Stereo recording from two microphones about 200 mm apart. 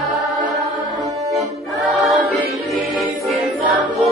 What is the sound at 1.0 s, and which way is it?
Accordion, 15° right (ahead or behind).